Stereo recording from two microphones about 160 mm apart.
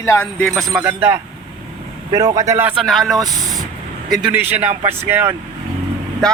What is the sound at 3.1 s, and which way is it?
Speech, 25° right (ahead or behind).